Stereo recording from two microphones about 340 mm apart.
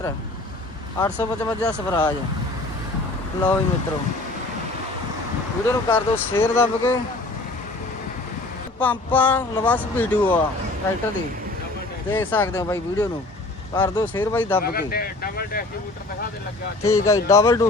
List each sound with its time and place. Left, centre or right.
0.9 s speech: centre
5.6 s speech: centre
8.8 s speech: centre
12.1 s speech: centre
14.6 s speech: left
16.8 s speech: centre